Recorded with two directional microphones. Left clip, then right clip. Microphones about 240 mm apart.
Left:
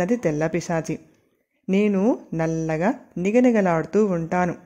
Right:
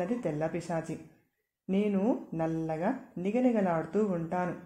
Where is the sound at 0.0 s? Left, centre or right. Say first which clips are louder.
Left 10 dB; left.